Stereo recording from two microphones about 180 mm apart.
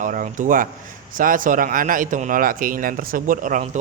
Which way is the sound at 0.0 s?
45° right (ahead or behind).